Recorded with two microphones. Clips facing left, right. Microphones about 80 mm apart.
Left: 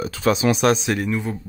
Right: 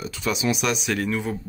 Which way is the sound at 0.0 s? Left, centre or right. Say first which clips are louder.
Left 6 dB; left.